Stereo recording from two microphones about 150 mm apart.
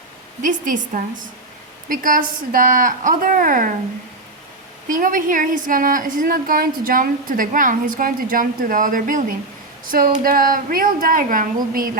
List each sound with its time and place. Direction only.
0.4 s a woman's voice: 60° right (ahead or behind)
4.9 s a woman's voice: 65° right (ahead or behind)